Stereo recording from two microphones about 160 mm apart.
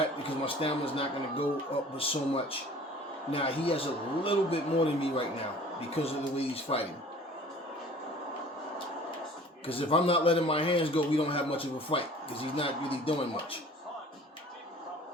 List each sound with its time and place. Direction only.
0.0 s a man's voice: 35° left (ahead or behind)
9.6 s a man's voice: 35° left (ahead or behind)